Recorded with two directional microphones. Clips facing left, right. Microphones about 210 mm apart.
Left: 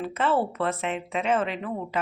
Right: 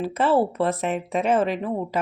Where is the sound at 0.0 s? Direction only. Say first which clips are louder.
Right 4 dB; 35° right (ahead or behind).